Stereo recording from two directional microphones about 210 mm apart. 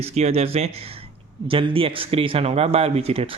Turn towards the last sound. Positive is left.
turn(degrees=-30)  # may be behind; listen again after turning